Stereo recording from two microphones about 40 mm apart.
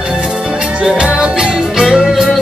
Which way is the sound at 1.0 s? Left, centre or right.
Centre.